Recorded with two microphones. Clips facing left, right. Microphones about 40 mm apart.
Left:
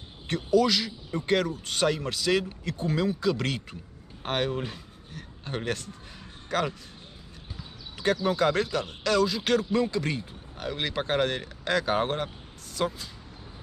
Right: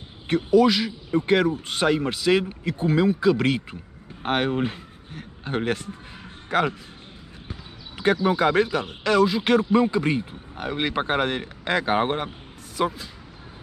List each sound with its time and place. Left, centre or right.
0.3 s a man's voice: centre
8.0 s a man's voice: right